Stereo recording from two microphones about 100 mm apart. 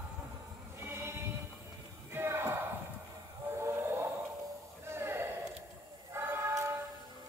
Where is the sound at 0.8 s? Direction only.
25° right (ahead or behind).